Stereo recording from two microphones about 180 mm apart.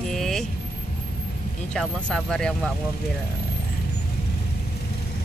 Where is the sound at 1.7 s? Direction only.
5° left (ahead or behind).